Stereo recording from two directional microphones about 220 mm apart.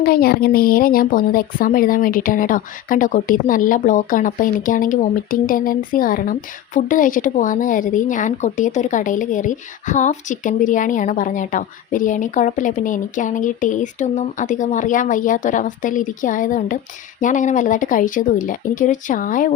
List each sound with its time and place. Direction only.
0.0 s a woman's voice: 45° left (ahead or behind)